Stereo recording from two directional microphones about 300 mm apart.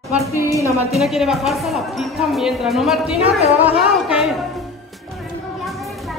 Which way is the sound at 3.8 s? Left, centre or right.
Centre.